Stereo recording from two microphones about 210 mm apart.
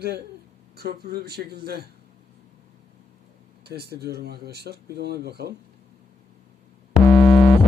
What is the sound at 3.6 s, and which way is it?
Speech, 50° right (ahead or behind).